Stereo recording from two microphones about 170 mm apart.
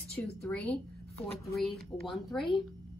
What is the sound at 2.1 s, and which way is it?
Speech, centre (ahead or behind).